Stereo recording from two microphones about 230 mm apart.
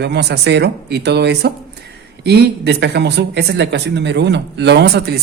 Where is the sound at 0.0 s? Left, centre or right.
Right.